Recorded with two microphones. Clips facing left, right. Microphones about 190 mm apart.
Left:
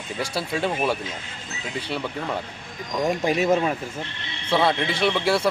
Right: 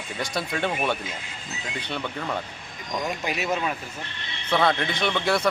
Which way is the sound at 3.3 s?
45° left (ahead or behind).